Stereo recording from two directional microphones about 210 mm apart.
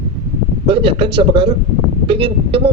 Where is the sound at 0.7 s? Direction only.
25° right (ahead or behind).